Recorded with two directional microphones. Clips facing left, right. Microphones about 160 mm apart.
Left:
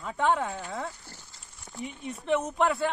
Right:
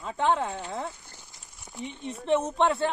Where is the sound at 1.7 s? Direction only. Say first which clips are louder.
Even; 10° right (ahead or behind).